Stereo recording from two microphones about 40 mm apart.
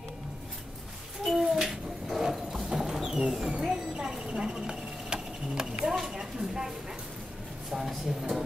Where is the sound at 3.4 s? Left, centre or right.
Right.